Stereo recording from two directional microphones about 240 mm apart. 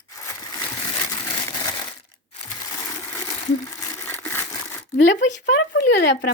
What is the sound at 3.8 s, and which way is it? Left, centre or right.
Crumpling, centre.